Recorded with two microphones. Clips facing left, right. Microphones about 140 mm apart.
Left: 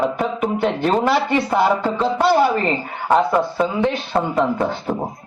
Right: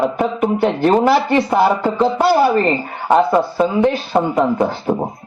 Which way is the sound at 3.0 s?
20° right (ahead or behind).